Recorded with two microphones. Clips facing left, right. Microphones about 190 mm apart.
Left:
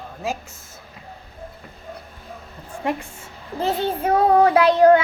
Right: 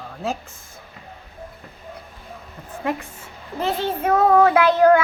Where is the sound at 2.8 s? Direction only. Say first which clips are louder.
Even; 25° left (ahead or behind).